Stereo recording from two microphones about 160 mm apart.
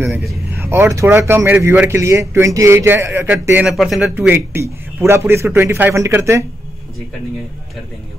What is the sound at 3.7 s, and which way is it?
Speech, centre (ahead or behind).